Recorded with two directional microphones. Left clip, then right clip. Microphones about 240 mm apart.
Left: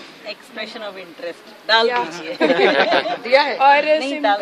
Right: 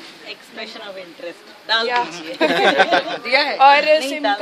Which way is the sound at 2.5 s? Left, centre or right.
Right.